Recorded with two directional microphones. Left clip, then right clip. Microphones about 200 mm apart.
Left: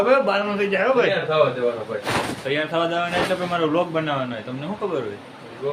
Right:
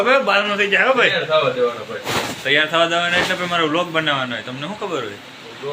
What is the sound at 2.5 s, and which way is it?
A man's voice, centre (ahead or behind).